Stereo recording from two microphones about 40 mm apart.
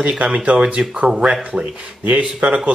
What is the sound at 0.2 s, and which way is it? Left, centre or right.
Speech, right.